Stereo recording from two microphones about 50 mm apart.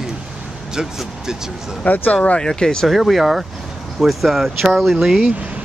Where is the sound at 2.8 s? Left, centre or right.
Centre.